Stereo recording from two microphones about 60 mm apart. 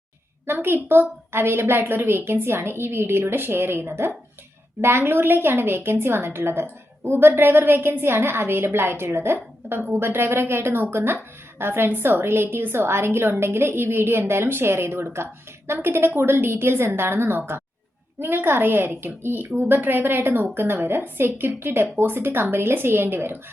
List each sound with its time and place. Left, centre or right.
0.4 s a woman's voice: right